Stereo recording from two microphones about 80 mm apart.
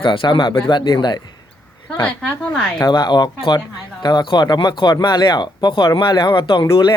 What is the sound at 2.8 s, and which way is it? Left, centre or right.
Speech, left.